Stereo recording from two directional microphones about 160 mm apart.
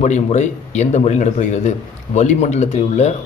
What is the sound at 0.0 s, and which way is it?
A man's voice, 45° left (ahead or behind).